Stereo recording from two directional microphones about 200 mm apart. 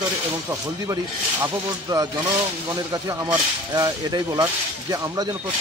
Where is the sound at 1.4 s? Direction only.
20° right (ahead or behind).